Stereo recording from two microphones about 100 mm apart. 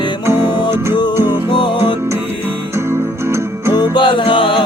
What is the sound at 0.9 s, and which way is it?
Music, 50° left (ahead or behind).